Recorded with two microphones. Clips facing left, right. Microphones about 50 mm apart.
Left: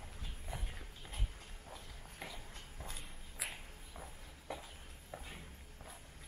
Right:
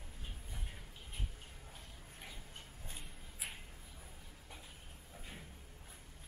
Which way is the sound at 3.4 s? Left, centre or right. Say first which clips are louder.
Left 2 dB; left.